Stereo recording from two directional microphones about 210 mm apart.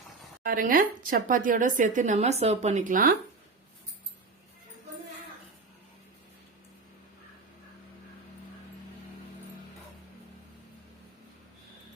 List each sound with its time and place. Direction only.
0.4 s speech: 40° right (ahead or behind)